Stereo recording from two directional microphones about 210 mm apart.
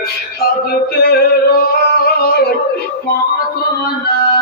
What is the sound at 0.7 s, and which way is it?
Music, 45° left (ahead or behind).